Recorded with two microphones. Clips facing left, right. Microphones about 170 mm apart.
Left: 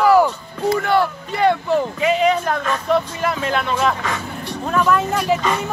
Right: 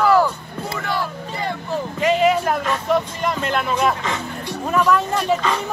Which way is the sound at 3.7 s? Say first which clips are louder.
Even; 15° right (ahead or behind).